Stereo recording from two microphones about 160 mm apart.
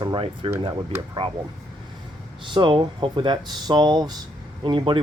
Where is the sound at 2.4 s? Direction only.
30° right (ahead or behind).